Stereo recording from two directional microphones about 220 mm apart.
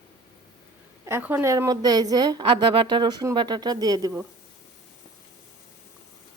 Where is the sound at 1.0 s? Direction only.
10° right (ahead or behind).